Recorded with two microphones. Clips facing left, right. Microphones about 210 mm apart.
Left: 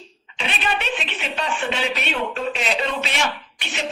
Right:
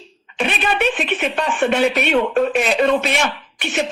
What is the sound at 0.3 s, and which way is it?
Speech, 55° right (ahead or behind).